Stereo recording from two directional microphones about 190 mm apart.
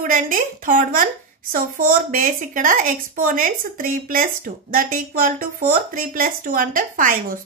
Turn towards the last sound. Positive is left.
turn(degrees=-45)  # may be behind; listen again after turning